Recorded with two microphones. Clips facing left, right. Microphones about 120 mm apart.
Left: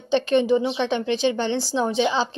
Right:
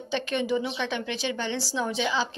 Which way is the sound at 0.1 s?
25° left (ahead or behind).